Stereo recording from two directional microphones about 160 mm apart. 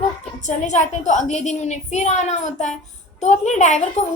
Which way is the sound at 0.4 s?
50° left (ahead or behind).